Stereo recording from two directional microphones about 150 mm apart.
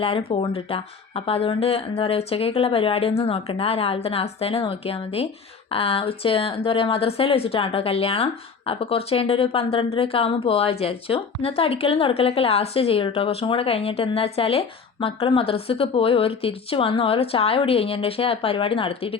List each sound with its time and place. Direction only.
0.0 s speech: 40° left (ahead or behind)